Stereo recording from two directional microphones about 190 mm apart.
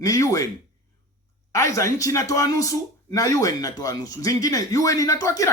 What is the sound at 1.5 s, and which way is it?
A man's voice, 15° left (ahead or behind).